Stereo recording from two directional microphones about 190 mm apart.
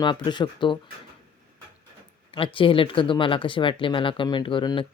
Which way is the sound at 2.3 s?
25° left (ahead or behind).